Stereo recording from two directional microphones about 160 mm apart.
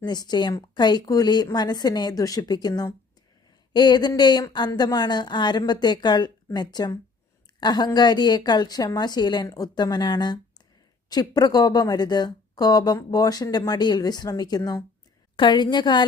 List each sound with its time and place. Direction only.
0.0 s speech: 25° left (ahead or behind)